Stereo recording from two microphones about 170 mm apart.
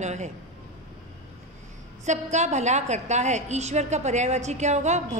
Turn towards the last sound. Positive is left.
turn(degrees=-45)  # may be behind; listen again after turning